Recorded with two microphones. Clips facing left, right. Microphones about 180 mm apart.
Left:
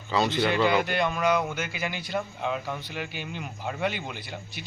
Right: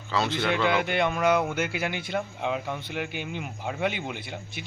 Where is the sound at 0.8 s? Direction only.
20° right (ahead or behind).